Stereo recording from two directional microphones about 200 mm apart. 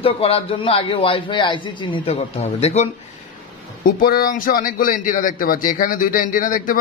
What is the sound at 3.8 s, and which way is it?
A man's voice, 45° left (ahead or behind).